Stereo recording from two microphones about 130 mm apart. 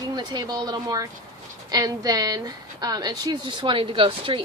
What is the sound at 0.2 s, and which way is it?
A woman's voice, 30° right (ahead or behind).